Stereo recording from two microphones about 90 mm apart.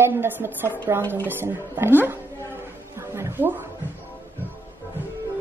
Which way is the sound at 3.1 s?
30° right (ahead or behind).